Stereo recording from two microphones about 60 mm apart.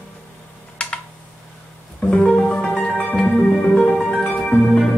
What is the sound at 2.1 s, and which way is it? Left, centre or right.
Music, centre.